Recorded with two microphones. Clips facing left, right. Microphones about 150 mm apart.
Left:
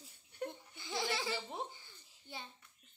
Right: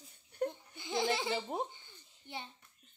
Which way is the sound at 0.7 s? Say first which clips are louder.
Right 4 dB; 20° right (ahead or behind).